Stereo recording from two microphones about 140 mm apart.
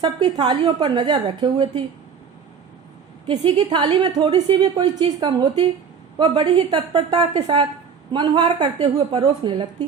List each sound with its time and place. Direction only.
0.0 s a woman's voice: 35° right (ahead or behind)
3.2 s a woman's voice: 40° right (ahead or behind)